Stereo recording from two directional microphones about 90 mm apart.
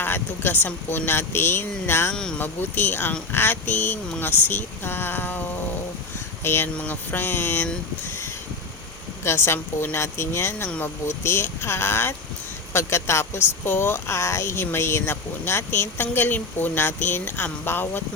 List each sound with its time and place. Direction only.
0.0 s speech: 20° left (ahead or behind)
2.1 s speech: 10° left (ahead or behind)
2.4 s speech: 25° left (ahead or behind)
6.4 s speech: 25° left (ahead or behind)
9.2 s speech: 30° left (ahead or behind)